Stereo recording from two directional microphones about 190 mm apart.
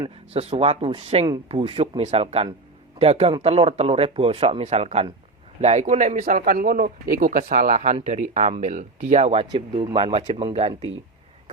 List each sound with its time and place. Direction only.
0.3 s speech: 30° right (ahead or behind)